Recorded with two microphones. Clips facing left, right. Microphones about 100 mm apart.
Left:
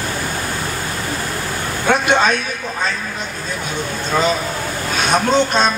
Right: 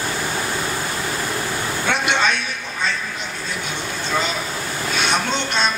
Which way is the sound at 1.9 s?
40° left (ahead or behind).